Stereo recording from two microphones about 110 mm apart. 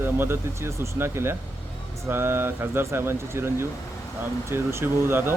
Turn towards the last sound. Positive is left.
turn(degrees=-20)  # may be behind; listen again after turning